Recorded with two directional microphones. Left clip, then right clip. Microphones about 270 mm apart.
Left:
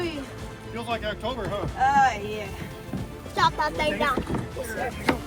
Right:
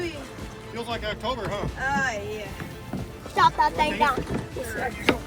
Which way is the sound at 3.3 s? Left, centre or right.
Centre.